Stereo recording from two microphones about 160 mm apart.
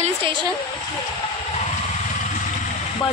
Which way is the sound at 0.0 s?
35° right (ahead or behind).